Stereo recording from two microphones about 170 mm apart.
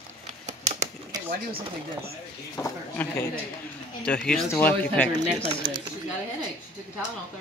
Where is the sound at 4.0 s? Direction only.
5° left (ahead or behind).